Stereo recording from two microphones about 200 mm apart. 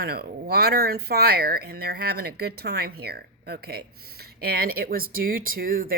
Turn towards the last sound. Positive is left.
turn(degrees=-45)  # may be behind; listen again after turning